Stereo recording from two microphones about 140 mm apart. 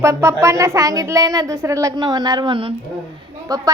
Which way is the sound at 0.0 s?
20° right (ahead or behind).